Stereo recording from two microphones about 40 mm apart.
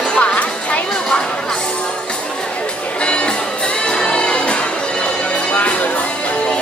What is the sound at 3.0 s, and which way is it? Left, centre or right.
Music, left.